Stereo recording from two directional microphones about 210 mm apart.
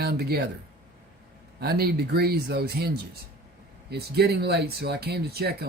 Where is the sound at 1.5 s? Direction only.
50° right (ahead or behind).